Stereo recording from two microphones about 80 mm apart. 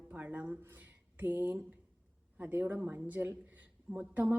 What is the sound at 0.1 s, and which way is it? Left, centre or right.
A woman's voice, right.